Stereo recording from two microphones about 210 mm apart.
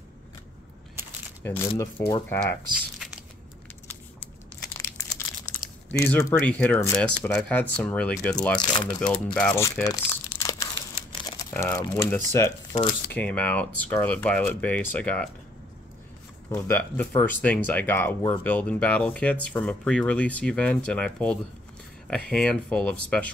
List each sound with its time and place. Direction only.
1.4 s speech: 10° left (ahead or behind)
3.0 s biting: centre (ahead or behind)
4.7 s crumpling: 15° left (ahead or behind)
5.9 s speech: 10° left (ahead or behind)
8.5 s speech: 20° left (ahead or behind)
9.0 s speech: 5° left (ahead or behind)
16.4 s speech: 10° left (ahead or behind)